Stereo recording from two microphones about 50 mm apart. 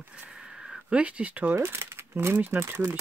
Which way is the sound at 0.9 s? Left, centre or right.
Right.